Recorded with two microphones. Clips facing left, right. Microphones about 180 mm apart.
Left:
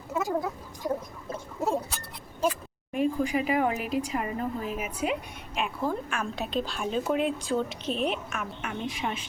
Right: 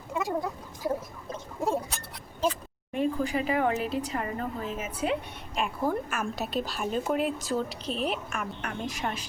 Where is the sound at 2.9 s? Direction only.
10° left (ahead or behind).